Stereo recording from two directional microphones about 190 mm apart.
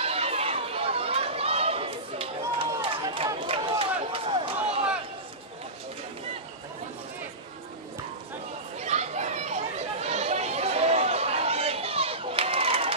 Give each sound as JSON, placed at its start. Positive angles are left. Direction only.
{"t": 0.0, "sound": "chatter", "side_deg": -30}
{"t": 2.6, "sound": "run", "side_deg": -30}
{"t": 3.3, "sound": "a sound", "side_deg": -30}
{"t": 8.7, "sound": "children playing", "side_deg": -35}
{"t": 10.0, "sound": "chatter", "side_deg": -35}